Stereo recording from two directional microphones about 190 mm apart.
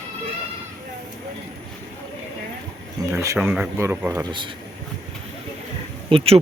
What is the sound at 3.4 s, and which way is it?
Speech, 10° right (ahead or behind).